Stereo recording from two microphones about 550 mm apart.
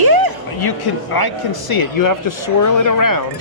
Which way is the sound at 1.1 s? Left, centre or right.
Left.